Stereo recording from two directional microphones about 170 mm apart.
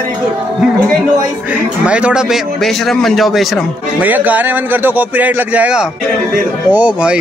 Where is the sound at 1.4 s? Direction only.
5° right (ahead or behind).